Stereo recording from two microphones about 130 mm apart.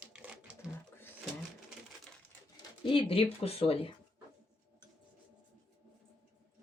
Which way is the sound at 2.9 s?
45° left (ahead or behind).